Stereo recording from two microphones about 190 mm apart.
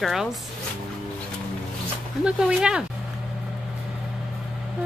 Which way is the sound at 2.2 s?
5° right (ahead or behind).